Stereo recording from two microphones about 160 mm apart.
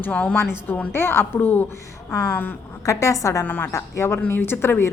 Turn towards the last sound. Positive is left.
turn(degrees=15)  # may be behind; listen again after turning